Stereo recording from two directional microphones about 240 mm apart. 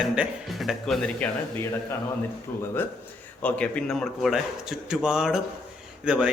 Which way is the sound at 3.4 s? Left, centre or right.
Centre.